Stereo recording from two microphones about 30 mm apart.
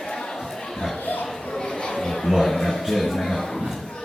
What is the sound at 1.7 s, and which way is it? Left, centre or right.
Chatter, left.